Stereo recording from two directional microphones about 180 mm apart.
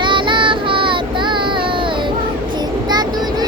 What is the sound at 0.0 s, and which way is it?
Child singing, 25° right (ahead or behind).